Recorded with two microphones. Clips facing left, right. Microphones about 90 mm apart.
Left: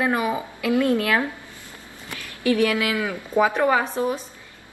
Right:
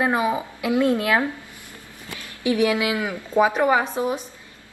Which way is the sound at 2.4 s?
15° right (ahead or behind).